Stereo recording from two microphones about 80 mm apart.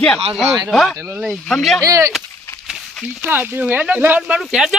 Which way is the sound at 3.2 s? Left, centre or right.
Right.